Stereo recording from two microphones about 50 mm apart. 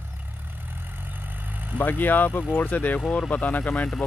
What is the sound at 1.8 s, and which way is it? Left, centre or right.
Speech, left.